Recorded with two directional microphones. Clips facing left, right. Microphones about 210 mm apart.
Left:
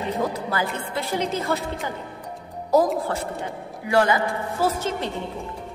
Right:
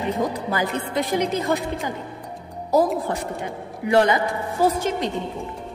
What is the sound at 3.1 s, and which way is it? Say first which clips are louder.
A woman's voice: right 1 dB; 15° right (ahead or behind).